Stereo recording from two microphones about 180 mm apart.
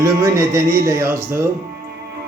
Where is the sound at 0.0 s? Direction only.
15° right (ahead or behind).